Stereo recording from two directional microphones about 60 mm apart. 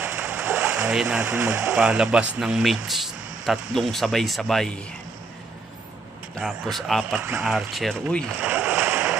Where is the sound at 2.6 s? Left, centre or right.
Centre.